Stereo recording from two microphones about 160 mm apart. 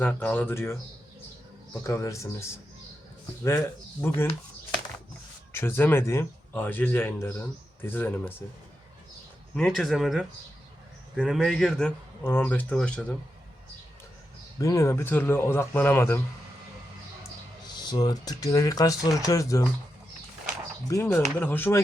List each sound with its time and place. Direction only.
0.0 s speech: 10° left (ahead or behind)
1.9 s speech: 20° left (ahead or behind)
4.0 s speech: 10° left (ahead or behind)
5.5 s speech: 15° left (ahead or behind)
9.6 s speech: 5° left (ahead or behind)
14.6 s speech: 20° left (ahead or behind)
17.9 s speech: 25° left (ahead or behind)
20.8 s speech: 15° left (ahead or behind)